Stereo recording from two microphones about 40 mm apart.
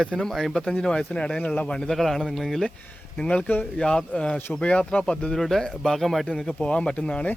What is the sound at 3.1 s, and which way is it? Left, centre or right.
Speech, left.